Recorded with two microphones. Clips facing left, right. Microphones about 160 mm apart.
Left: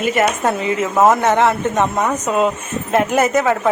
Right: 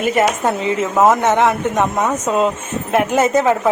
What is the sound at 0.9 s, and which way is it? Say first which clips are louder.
Speech: even; 10° left (ahead or behind).